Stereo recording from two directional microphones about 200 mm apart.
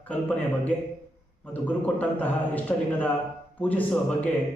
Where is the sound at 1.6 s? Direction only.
10° left (ahead or behind).